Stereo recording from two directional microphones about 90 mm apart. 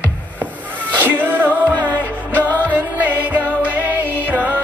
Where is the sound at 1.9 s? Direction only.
15° left (ahead or behind).